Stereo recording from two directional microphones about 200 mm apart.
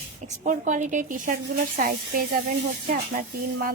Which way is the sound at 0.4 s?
40° right (ahead or behind).